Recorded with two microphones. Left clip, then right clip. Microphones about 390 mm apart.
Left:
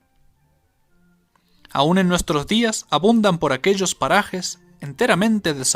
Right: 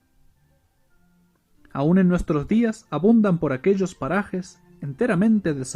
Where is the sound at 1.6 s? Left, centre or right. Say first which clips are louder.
Left 4 dB; left.